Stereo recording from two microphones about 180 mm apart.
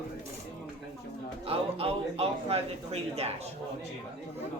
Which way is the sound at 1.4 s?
35° right (ahead or behind).